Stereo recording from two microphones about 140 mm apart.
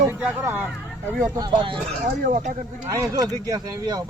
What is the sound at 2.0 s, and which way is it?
Speech, 75° right (ahead or behind).